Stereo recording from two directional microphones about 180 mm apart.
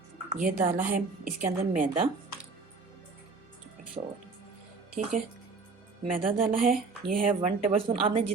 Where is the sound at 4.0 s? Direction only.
30° right (ahead or behind).